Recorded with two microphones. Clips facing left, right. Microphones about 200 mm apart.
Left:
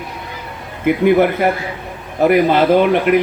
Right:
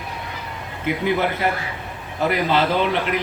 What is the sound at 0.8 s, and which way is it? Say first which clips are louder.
Speech: left 9 dB; 55° left (ahead or behind).